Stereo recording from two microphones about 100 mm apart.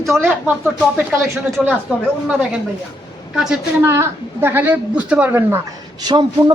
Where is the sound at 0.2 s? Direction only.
15° right (ahead or behind).